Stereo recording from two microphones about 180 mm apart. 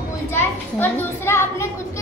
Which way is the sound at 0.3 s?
15° left (ahead or behind).